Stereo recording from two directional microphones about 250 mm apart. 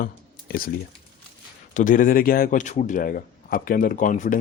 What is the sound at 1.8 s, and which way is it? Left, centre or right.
Speech, left.